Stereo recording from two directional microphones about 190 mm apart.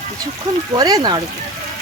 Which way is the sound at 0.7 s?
20° right (ahead or behind).